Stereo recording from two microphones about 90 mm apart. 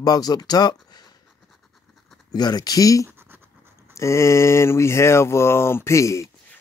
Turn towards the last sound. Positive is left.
turn(degrees=35)  # may be behind; listen again after turning